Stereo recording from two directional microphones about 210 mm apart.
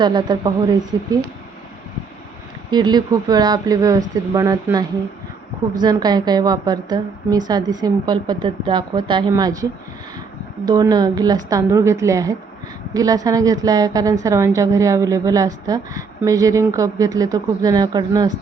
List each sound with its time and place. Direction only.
0.0 s a woman's voice: 20° right (ahead or behind)
2.6 s a woman's voice: 20° right (ahead or behind)
10.7 s a woman's voice: 20° right (ahead or behind)